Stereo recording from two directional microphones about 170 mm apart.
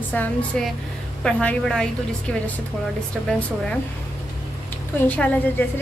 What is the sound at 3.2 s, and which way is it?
Speech, 10° left (ahead or behind).